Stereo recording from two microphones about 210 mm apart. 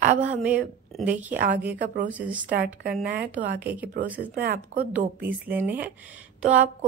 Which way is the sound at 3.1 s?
40° right (ahead or behind).